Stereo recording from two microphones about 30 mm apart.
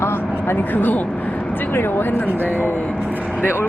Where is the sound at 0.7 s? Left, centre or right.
Left.